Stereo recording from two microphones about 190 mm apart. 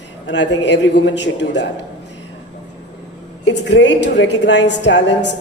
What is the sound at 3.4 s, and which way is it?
A man's voice, 70° left (ahead or behind).